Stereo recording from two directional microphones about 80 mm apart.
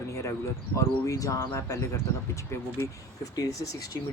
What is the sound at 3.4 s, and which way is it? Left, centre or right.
Speech, left.